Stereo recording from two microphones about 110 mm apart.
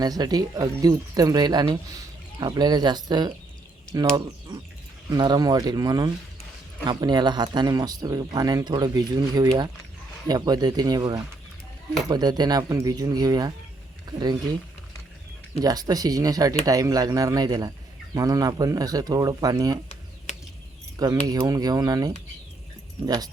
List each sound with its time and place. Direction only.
0.0 s speech: 35° right (ahead or behind)
5.1 s speech: 40° right (ahead or behind)
15.6 s speech: 35° right (ahead or behind)
21.0 s speech: 35° right (ahead or behind)